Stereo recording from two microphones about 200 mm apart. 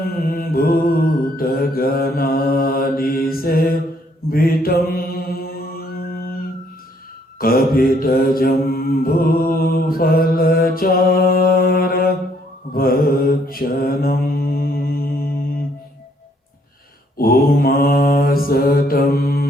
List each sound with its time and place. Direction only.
0.0 s mantra: 45° left (ahead or behind)
7.3 s mantra: 45° left (ahead or behind)
17.2 s mantra: 45° left (ahead or behind)